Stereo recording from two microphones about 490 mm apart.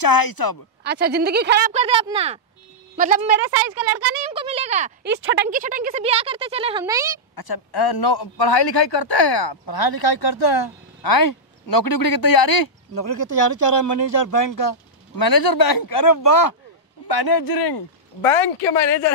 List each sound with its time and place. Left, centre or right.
0.0 s a man's voice: left
0.8 s speech: centre
3.5 s speech: centre
7.3 s a man's voice: left
18.2 s speech: centre